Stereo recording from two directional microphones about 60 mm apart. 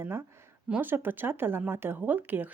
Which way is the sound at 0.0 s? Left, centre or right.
Right.